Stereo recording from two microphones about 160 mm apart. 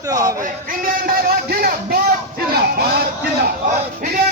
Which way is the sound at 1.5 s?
70° right (ahead or behind).